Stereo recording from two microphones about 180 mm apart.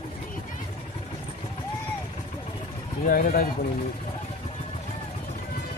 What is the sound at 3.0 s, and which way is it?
Speech, 50° left (ahead or behind).